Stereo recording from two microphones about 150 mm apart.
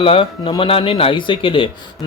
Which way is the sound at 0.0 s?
35° left (ahead or behind).